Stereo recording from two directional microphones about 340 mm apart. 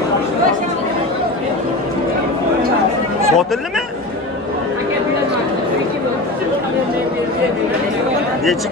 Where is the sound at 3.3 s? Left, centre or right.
Centre.